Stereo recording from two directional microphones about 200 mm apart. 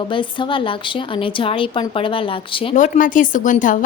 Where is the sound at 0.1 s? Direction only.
25° left (ahead or behind).